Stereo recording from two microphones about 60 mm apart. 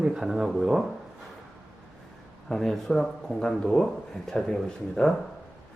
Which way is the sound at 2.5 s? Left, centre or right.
Centre.